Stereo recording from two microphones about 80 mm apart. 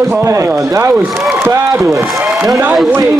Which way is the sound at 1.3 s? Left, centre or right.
Right.